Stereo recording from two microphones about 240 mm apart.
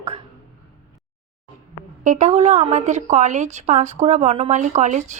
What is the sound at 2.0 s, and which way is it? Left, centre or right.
A woman's voice, right.